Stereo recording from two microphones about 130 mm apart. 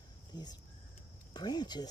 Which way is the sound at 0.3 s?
30° left (ahead or behind).